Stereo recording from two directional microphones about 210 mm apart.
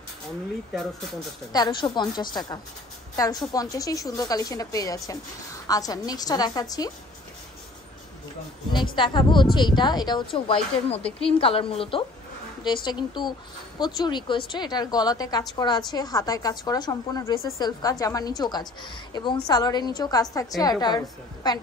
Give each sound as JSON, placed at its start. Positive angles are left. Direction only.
{"t": 1.5, "sound": "a woman's voice", "side_deg": 20}
{"t": 8.9, "sound": "a woman's voice", "side_deg": 20}
{"t": 11.1, "sound": "a woman's voice", "side_deg": 5}
{"t": 11.3, "sound": "a woman's voice", "side_deg": 25}